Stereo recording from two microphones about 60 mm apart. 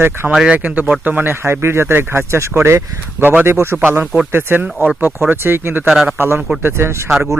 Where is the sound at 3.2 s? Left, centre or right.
Right.